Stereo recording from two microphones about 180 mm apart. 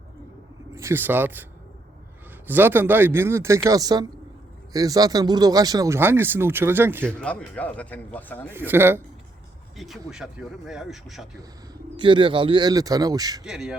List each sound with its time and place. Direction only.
0.7 s a man's voice: 15° right (ahead or behind)
2.5 s speech: 10° right (ahead or behind)
7.2 s speech: 5° left (ahead or behind)
8.4 s speech: 10° right (ahead or behind)
9.7 s speech: centre (ahead or behind)
11.3 s speech: 25° right (ahead or behind)
13.4 s speech: 5° right (ahead or behind)